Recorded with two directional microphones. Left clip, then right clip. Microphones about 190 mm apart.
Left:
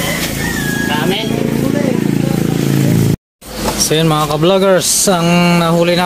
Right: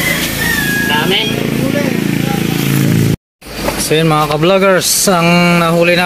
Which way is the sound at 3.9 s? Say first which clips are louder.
Right 3 dB; centre (ahead or behind).